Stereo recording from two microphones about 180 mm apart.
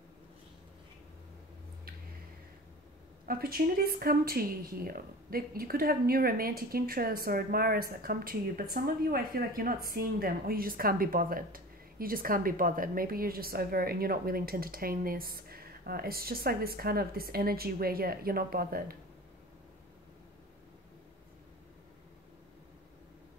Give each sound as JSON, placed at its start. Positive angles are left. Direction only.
{"t": 3.3, "sound": "a woman's voice", "side_deg": -55}